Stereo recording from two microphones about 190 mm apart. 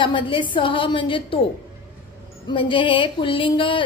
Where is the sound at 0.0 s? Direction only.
25° left (ahead or behind).